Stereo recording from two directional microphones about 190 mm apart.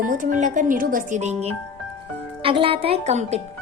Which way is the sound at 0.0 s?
45° right (ahead or behind).